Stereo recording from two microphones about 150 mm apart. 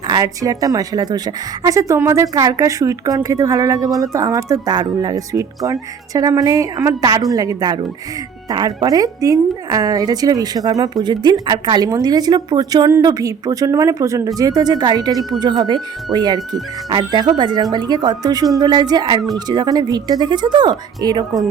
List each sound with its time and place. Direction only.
0.1 s a woman's voice: 25° right (ahead or behind)